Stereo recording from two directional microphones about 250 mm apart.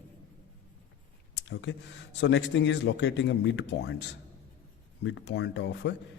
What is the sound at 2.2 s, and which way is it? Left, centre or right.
Speech, left.